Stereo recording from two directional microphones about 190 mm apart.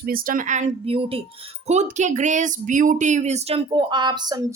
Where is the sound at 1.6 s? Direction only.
35° right (ahead or behind).